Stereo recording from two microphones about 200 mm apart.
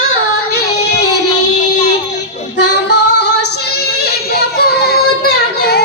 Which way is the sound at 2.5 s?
55° left (ahead or behind).